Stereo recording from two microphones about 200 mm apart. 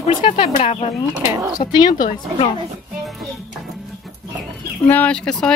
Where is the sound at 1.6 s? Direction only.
20° left (ahead or behind).